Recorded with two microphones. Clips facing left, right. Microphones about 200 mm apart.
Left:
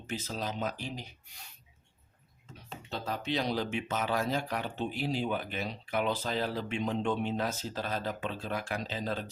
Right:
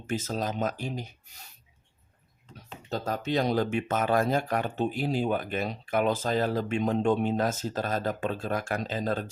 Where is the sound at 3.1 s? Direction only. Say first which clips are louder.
Right 5 dB; 45° right (ahead or behind).